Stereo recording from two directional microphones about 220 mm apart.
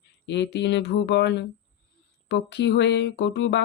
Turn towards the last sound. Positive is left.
turn(degrees=55)  # may be behind; listen again after turning